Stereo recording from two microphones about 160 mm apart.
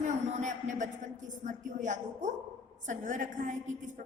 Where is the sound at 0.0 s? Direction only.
50° right (ahead or behind).